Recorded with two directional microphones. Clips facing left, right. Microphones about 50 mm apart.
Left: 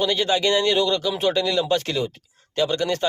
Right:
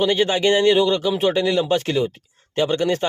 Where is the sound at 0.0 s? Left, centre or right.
Right.